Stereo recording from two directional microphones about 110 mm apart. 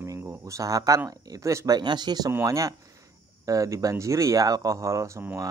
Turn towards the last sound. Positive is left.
turn(degrees=-25)  # may be behind; listen again after turning